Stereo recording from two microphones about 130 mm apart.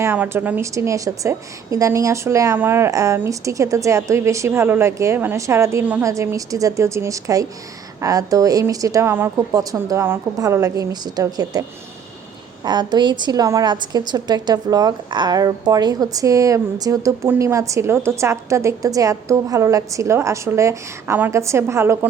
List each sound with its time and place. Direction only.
0.0 s a woman's voice: 15° right (ahead or behind)
12.6 s a woman's voice: 35° right (ahead or behind)